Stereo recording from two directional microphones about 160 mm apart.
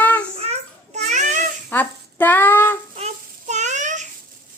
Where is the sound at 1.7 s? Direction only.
10° left (ahead or behind).